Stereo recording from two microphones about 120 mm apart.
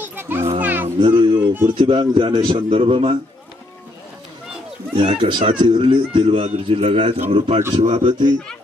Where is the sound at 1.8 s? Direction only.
45° right (ahead or behind).